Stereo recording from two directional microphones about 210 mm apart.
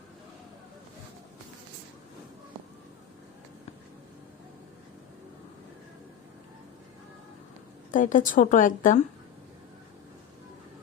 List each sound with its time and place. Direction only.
7.9 s a woman's voice: 40° left (ahead or behind)